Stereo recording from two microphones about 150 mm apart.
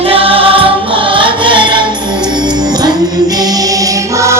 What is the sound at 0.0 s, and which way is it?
Music, 40° right (ahead or behind).